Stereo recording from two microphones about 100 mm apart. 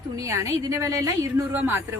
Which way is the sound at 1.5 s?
20° right (ahead or behind).